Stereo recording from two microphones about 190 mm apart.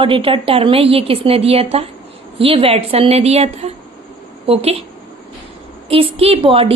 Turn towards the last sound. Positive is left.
turn(degrees=-30)  # may be behind; listen again after turning